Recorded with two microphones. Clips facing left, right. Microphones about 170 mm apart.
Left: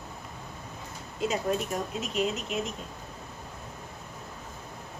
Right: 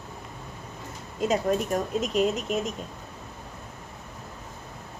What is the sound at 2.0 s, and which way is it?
Speech, 45° right (ahead or behind).